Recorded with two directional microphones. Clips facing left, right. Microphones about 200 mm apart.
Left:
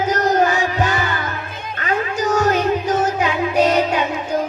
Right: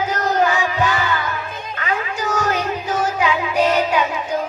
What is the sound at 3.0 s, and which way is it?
Child singing, 40° left (ahead or behind).